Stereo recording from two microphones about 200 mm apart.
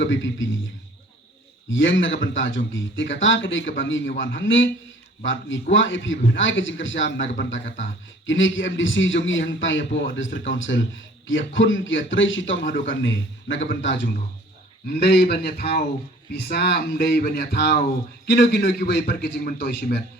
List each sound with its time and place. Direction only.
0.0 s a man's voice: 70° left (ahead or behind)
1.7 s a man's voice: 70° left (ahead or behind)
14.8 s a man's voice: 50° left (ahead or behind)